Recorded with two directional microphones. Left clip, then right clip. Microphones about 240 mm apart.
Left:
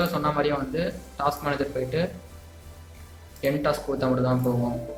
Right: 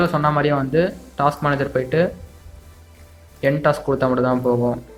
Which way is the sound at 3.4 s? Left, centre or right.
Right.